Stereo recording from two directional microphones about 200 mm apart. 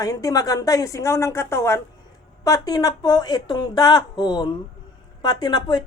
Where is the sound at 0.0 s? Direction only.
20° left (ahead or behind).